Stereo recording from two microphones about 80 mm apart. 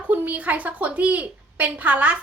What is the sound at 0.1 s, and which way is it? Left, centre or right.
A woman's voice, centre.